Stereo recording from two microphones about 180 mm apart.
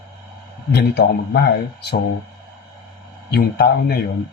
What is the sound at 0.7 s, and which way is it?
Speech, 65° left (ahead or behind).